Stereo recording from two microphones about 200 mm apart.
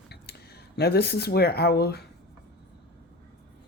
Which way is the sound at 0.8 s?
55° left (ahead or behind).